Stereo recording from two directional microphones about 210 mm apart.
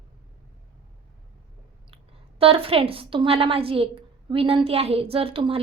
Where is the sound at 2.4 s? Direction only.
25° right (ahead or behind).